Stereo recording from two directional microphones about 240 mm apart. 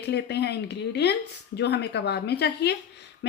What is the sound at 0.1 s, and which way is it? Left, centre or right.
A woman's voice, left.